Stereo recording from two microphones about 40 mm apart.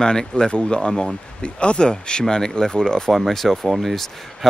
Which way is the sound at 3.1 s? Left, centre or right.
Centre.